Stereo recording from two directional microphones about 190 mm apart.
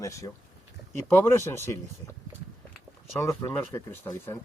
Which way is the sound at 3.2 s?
10° left (ahead or behind).